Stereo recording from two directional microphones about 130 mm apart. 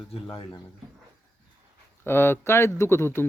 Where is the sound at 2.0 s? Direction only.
15° left (ahead or behind).